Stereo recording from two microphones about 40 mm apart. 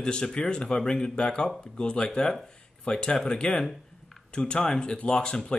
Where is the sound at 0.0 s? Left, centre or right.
Centre.